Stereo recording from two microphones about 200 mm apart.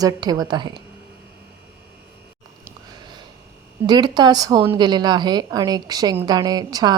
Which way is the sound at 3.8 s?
20° right (ahead or behind).